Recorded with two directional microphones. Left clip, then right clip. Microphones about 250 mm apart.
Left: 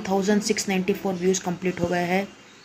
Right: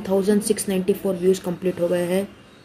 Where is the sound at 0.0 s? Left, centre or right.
Centre.